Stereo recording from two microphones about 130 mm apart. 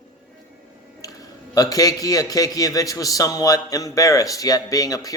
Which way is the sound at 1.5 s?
30° left (ahead or behind).